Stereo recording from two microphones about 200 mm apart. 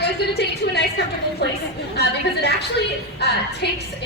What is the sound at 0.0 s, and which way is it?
A woman's voice, 55° left (ahead or behind).